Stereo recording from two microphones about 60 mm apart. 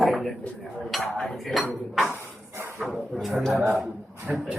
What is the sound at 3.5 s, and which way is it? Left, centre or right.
Speech, right.